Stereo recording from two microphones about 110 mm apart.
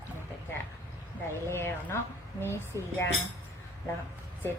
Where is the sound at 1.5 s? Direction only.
25° left (ahead or behind).